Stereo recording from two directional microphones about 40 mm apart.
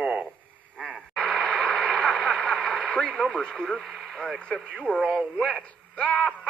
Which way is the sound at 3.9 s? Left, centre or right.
Centre.